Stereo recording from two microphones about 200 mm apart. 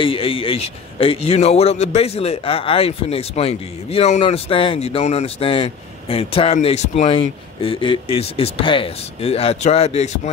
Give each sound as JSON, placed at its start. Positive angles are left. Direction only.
{"t": 0.0, "sound": "a man's voice", "side_deg": 25}